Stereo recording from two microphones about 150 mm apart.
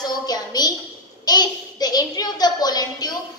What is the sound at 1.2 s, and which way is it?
A child's voice, 25° left (ahead or behind).